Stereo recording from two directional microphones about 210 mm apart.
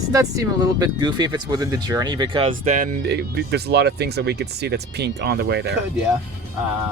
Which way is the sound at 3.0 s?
50° right (ahead or behind).